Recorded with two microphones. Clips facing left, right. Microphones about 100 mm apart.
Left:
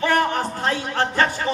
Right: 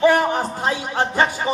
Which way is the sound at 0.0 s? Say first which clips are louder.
Right 4 dB; 15° right (ahead or behind).